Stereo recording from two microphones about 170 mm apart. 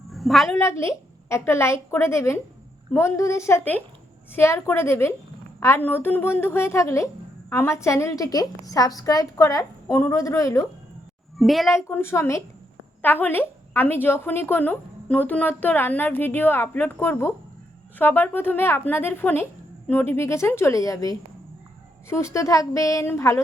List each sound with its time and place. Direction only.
0.1 s a sound: centre (ahead or behind)
0.5 s a woman's voice: 15° left (ahead or behind)
11.3 s a child's voice: centre (ahead or behind)
11.7 s a woman's voice: 15° left (ahead or behind)